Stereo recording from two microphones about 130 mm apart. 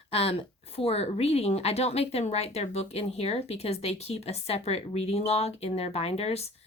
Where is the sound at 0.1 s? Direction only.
50° left (ahead or behind).